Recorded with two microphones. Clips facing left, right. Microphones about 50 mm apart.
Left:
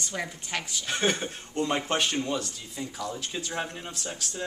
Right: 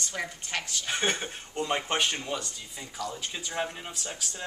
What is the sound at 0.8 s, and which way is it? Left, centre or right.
A woman's voice, centre.